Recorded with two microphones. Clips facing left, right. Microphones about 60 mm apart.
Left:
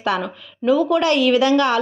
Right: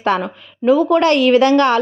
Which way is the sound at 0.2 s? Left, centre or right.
Right.